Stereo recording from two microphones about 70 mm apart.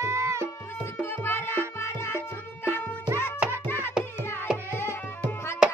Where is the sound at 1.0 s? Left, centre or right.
Left.